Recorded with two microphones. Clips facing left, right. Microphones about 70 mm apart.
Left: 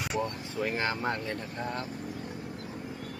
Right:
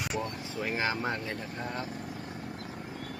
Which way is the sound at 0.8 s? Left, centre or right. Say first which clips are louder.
Right 2 dB; centre.